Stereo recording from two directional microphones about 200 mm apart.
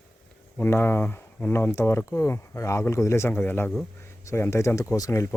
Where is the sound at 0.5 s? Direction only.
10° left (ahead or behind).